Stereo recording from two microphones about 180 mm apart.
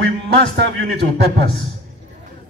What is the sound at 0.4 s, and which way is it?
Speech, 75° right (ahead or behind).